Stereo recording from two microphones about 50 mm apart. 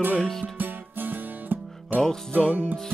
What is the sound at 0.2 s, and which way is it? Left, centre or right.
Music, centre.